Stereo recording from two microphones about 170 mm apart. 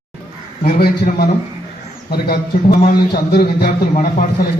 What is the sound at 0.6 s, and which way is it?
Speech, 65° left (ahead or behind).